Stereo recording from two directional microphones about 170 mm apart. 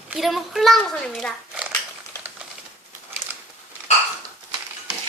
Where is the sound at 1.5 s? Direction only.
5° right (ahead or behind).